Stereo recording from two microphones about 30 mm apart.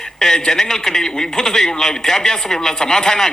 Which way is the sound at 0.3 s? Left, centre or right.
Centre.